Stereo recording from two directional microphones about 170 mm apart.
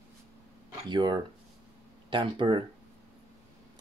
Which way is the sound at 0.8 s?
25° right (ahead or behind).